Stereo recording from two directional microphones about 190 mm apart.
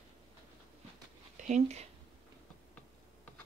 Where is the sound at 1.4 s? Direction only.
40° right (ahead or behind).